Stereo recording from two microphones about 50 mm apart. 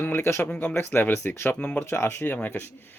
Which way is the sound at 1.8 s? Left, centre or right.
Left.